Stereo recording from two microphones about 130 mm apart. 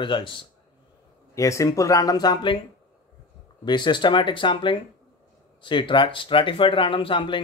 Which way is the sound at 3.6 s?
35° left (ahead or behind).